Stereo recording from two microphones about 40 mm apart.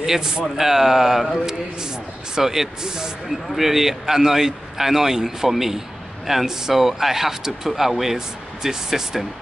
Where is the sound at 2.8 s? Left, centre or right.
Centre.